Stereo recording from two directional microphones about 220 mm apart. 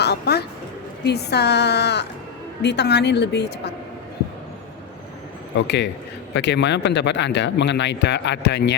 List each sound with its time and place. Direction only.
0.0 s a sound: 50° left (ahead or behind)
1.0 s speech: 50° left (ahead or behind)
5.5 s speech: 50° left (ahead or behind)